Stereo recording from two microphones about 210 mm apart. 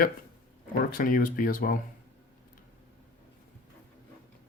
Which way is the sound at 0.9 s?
40° left (ahead or behind).